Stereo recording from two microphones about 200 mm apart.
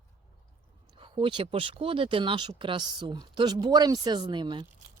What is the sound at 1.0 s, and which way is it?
Speech, 25° right (ahead or behind).